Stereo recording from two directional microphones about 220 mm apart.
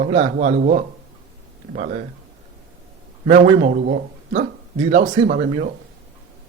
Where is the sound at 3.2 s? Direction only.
35° right (ahead or behind).